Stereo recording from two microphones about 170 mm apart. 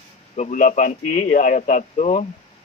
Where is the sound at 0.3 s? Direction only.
45° left (ahead or behind).